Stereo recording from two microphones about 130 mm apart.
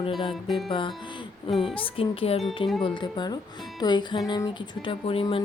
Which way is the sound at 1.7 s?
45° left (ahead or behind).